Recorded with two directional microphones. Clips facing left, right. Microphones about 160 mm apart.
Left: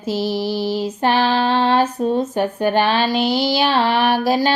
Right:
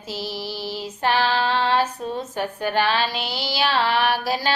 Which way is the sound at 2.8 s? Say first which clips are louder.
Left 4 dB; 20° left (ahead or behind).